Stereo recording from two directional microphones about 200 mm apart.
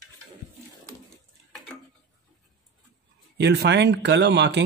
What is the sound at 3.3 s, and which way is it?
Speech, 55° right (ahead or behind).